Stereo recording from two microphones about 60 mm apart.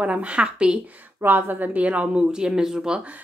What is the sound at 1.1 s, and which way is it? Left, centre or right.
Speech, right.